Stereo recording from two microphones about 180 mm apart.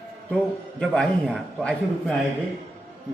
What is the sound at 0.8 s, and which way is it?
A man's voice, 5° left (ahead or behind).